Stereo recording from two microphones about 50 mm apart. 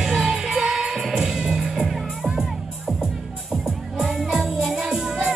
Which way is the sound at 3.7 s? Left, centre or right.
Centre.